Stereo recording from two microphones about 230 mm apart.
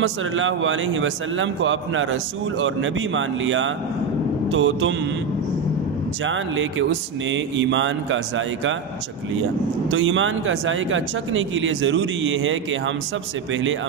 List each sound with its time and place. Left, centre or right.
0.0 s speech: right
6.2 s speech: right
9.8 s speech: right